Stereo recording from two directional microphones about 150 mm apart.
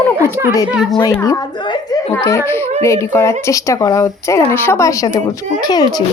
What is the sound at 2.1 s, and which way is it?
Speech, 20° left (ahead or behind).